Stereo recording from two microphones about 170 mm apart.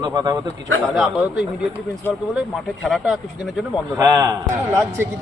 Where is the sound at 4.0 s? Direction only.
20° right (ahead or behind).